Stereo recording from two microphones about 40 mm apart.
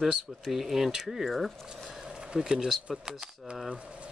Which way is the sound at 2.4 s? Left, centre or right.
Centre.